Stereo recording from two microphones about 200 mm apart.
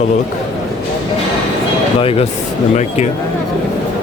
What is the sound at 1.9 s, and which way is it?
Speech, 30° left (ahead or behind).